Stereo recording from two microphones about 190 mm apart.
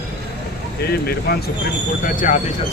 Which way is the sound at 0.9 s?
55° left (ahead or behind).